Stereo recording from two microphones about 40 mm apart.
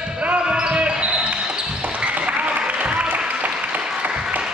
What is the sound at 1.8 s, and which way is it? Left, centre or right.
Applause, right.